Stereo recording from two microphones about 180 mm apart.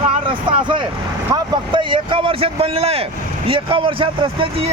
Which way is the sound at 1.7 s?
25° right (ahead or behind).